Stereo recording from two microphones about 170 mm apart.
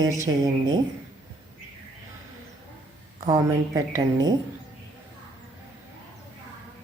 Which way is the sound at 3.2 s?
20° right (ahead or behind).